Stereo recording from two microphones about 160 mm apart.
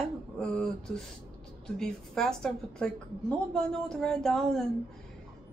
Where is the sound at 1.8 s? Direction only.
5° left (ahead or behind).